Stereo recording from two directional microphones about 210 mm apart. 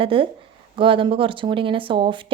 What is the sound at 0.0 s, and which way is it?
Speech, 25° right (ahead or behind).